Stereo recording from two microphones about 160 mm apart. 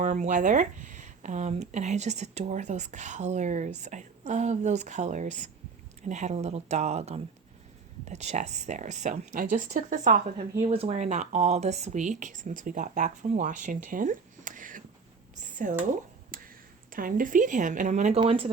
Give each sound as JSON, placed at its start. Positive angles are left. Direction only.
{"t": 0.0, "sound": "speech", "side_deg": -50}
{"t": 10.6, "sound": "speech", "side_deg": -35}
{"t": 16.3, "sound": "a sound", "side_deg": -60}
{"t": 16.9, "sound": "speech", "side_deg": -60}
{"t": 18.2, "sound": "speech", "side_deg": -35}